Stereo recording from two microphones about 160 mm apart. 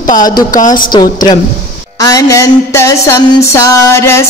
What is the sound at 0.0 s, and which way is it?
Speech, 25° left (ahead or behind).